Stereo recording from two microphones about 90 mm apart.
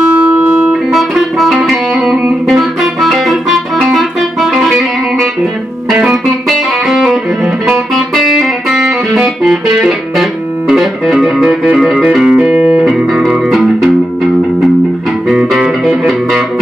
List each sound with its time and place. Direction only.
0.9 s music: centre (ahead or behind)
15.2 s music: 10° right (ahead or behind)